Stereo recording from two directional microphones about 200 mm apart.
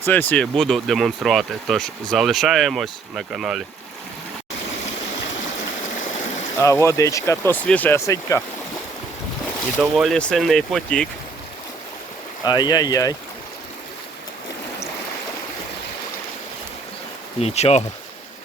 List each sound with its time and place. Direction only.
0.0 s speech: 10° left (ahead or behind)
6.6 s speech: 15° left (ahead or behind)
10.0 s speech: 5° left (ahead or behind)
12.5 s speech: 20° left (ahead or behind)
17.4 s speech: 30° left (ahead or behind)